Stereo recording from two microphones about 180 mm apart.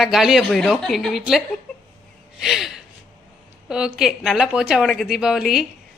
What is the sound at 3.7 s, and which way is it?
A woman's voice, 5° right (ahead or behind).